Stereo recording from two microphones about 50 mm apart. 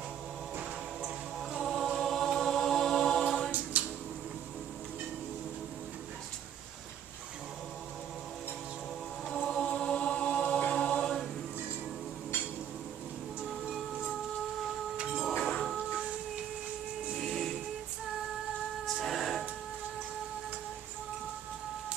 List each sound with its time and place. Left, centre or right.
0.6 s music: centre
1.6 s choir: centre
3.8 s a sound: right
9.3 s chant: centre
15.1 s a sound: centre
17.1 s steam whistle: centre
18.9 s music: centre